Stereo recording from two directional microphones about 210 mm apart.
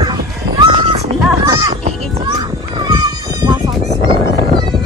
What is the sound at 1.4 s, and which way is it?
Music, 20° right (ahead or behind).